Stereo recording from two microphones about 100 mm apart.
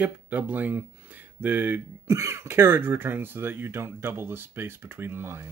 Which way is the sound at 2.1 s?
30° right (ahead or behind).